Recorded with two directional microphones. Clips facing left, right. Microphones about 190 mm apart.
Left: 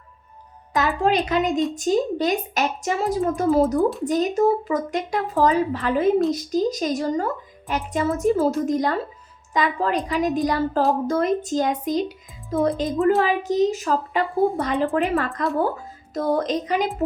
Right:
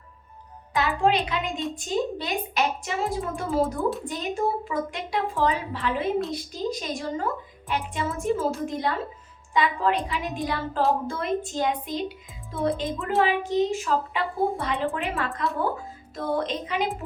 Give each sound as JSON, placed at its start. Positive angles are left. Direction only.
{"t": 0.7, "sound": "music", "side_deg": 40}
{"t": 1.7, "sound": "a woman's voice", "side_deg": 40}